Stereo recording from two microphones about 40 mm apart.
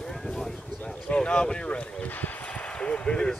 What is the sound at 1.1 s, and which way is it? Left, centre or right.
Speech, left.